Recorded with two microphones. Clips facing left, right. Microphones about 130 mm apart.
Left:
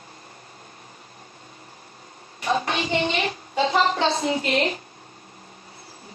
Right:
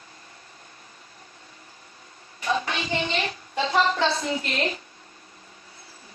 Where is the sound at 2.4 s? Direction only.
45° left (ahead or behind).